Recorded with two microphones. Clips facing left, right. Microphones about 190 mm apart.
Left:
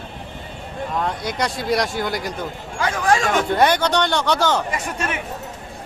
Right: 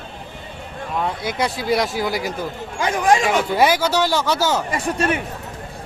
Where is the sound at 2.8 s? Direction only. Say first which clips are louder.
Right 2 dB; 20° right (ahead or behind).